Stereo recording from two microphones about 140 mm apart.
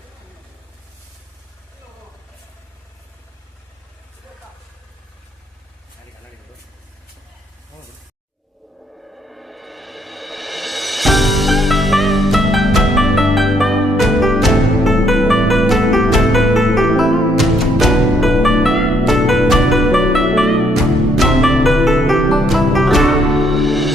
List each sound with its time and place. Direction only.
9.1 s music: centre (ahead or behind)